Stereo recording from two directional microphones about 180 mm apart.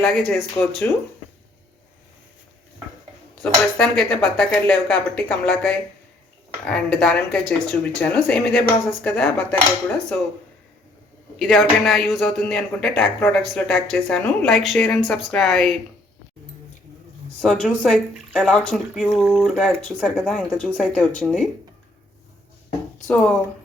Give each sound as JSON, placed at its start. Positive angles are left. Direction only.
{"t": 0.0, "sound": "speech", "side_deg": 5}
{"t": 3.4, "sound": "a woman's voice", "side_deg": 5}
{"t": 11.3, "sound": "a woman's voice", "side_deg": 0}
{"t": 17.4, "sound": "a woman's voice", "side_deg": 5}
{"t": 23.0, "sound": "a woman's voice", "side_deg": 5}